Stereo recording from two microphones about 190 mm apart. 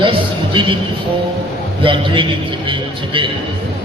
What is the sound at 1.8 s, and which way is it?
A man's voice, 25° right (ahead or behind).